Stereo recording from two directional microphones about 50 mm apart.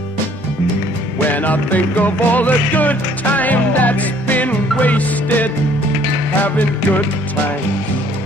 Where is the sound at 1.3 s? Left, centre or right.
Left.